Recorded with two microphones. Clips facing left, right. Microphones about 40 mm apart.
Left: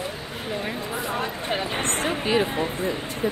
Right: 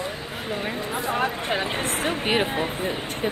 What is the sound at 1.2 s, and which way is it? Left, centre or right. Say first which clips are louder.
Speech: right 2 dB; right.